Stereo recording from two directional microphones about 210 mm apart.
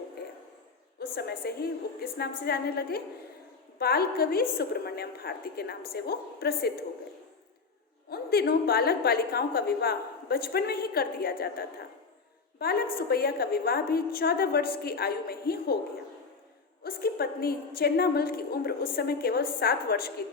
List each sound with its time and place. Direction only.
0.9 s a woman's voice: 45° left (ahead or behind)
8.1 s a woman's voice: 50° left (ahead or behind)
12.5 s a woman's voice: 45° left (ahead or behind)
16.8 s a woman's voice: 45° left (ahead or behind)